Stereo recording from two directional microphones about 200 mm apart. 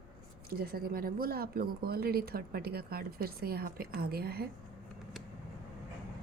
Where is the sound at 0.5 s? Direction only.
50° right (ahead or behind).